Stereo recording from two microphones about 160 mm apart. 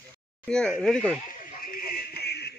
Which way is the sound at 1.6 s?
65° left (ahead or behind).